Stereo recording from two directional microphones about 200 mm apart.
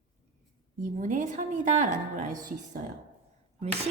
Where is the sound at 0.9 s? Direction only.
40° right (ahead or behind).